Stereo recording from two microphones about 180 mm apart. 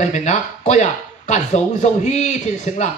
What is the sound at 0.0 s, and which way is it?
A man's voice, 40° left (ahead or behind).